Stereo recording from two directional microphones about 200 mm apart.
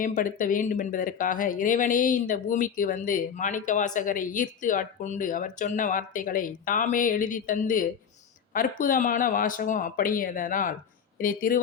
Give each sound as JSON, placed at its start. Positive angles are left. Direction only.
{"t": 0.0, "sound": "speech", "side_deg": 40}